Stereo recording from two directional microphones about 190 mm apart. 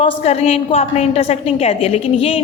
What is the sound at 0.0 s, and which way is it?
A woman's voice, 35° left (ahead or behind).